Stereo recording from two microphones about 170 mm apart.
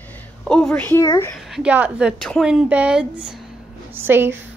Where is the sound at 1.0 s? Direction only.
20° left (ahead or behind).